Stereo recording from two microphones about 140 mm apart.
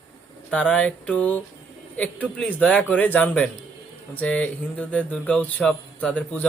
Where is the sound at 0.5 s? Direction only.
10° left (ahead or behind).